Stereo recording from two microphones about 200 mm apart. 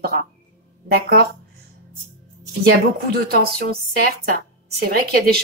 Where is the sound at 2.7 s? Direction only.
50° right (ahead or behind).